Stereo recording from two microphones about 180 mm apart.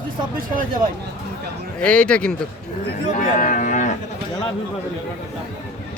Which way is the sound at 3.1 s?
45° left (ahead or behind).